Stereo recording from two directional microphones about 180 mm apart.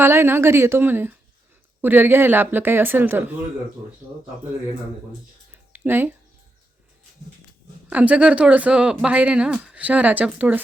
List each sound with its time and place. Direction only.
0.0 s a woman's voice: 15° right (ahead or behind)
5.5 s a sound: 10° right (ahead or behind)
7.9 s a woman's voice: 5° right (ahead or behind)